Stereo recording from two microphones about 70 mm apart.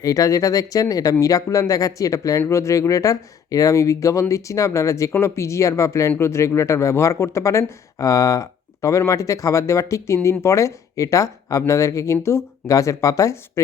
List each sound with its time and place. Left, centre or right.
0.0 s speech: left
12.7 s speech: left